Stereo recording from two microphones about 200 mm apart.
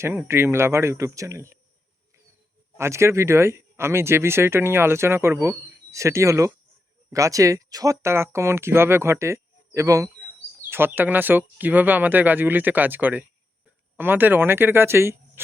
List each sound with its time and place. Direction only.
0.0 s speech: 10° right (ahead or behind)
2.7 s speech: 15° right (ahead or behind)